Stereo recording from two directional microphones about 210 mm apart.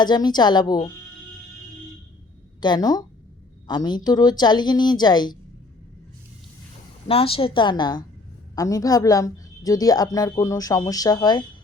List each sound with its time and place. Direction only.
0.0 s a woman's voice: 20° left (ahead or behind)
2.6 s a woman's voice: 20° left (ahead or behind)
7.1 s a woman's voice: 25° left (ahead or behind)